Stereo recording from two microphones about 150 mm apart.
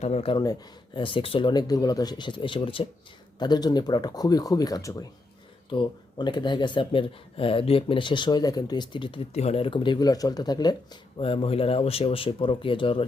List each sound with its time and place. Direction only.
0.0 s speech: 45° left (ahead or behind)